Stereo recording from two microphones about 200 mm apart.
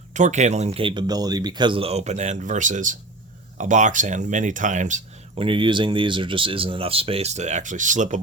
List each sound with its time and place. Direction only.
0.1 s speech: 35° right (ahead or behind)